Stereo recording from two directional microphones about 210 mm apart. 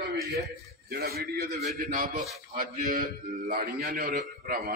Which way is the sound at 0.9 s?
45° right (ahead or behind).